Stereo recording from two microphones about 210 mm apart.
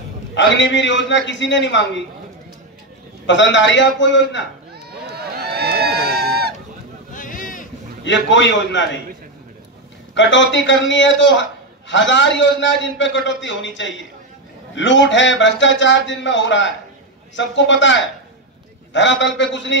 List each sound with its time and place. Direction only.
0.3 s a man's voice: 60° left (ahead or behind)
3.3 s a man's voice: 60° left (ahead or behind)
4.9 s a sound: 50° right (ahead or behind)
7.2 s a sound: 40° left (ahead or behind)
8.0 s a man's voice: 60° left (ahead or behind)
10.1 s a man's voice: 60° left (ahead or behind)